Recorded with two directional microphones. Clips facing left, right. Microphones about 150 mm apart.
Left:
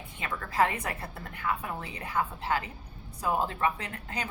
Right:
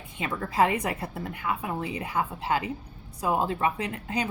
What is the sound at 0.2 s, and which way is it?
A woman's voice, 20° right (ahead or behind).